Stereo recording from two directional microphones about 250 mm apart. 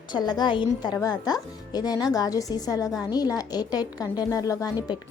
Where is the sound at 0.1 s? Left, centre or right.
Centre.